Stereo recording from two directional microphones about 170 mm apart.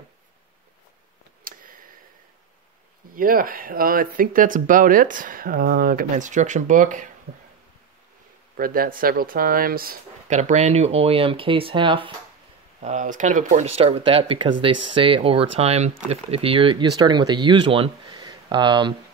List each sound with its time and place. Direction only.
1.4 s a sound: 55° right (ahead or behind)
3.2 s speech: 55° right (ahead or behind)
8.5 s speech: 55° right (ahead or behind)
10.2 s speech: 45° right (ahead or behind)
12.8 s speech: 45° right (ahead or behind); by 18.9 s 25° right (ahead or behind)